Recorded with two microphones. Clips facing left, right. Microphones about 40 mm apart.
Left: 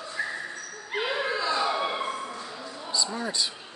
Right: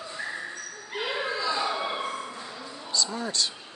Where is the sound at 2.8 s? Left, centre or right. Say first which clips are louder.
Even; centre.